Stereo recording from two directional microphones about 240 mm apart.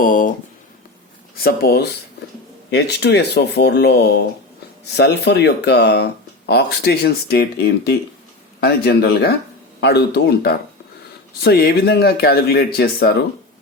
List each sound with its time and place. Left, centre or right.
0.0 s speech: left
1.4 s speech: left